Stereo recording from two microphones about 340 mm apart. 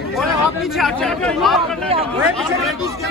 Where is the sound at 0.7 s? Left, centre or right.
Centre.